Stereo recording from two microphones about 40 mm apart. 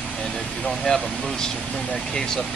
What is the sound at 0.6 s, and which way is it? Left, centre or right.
Speech, centre.